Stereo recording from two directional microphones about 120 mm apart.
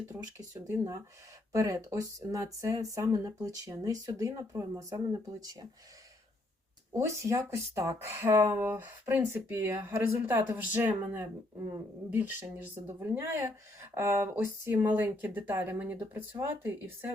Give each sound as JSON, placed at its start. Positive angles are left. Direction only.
{"t": 0.1, "sound": "speech", "side_deg": -30}
{"t": 1.5, "sound": "speech", "side_deg": -25}
{"t": 6.9, "sound": "speech", "side_deg": -25}